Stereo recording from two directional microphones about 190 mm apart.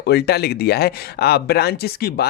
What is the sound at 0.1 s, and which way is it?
Speech, 55° left (ahead or behind).